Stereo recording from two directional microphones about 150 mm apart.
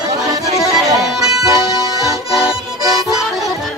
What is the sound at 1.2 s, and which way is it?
Music, 25° right (ahead or behind).